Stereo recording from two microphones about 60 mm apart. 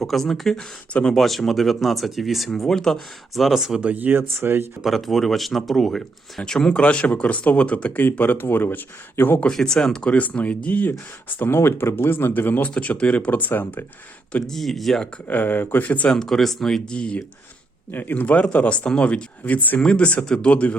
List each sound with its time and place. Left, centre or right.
0.0 s speech: centre
3.8 s speech: right
4.8 s speech: centre; by 9.4 s left
9.5 s speech: centre; by 12.7 s left
12.7 s speech: left
14.4 s speech: centre
15.3 s speech: left
16.1 s speech: centre
16.9 s speech: centre
17.9 s speech: left